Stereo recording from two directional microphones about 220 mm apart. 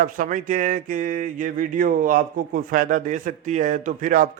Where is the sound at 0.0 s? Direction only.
35° right (ahead or behind).